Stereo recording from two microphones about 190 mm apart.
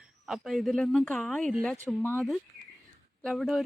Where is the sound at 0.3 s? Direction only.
Centre (ahead or behind).